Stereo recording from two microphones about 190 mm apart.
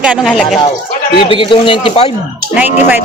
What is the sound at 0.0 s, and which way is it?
Speech, 5° right (ahead or behind).